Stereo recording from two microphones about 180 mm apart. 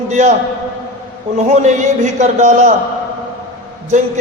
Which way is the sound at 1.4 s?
40° right (ahead or behind).